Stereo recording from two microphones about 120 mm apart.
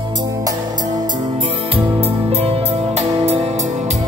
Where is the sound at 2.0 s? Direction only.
55° right (ahead or behind); by 4.0 s 80° right.